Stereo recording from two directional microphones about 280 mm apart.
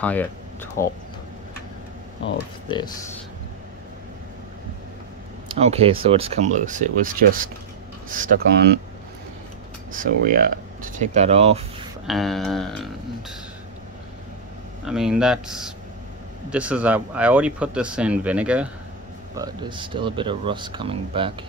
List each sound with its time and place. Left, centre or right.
0.0 s speech: centre
2.7 s speech: centre
5.5 s speech: right
9.9 s speech: right
12.1 s speech: centre
14.9 s speech: centre
19.3 s speech: centre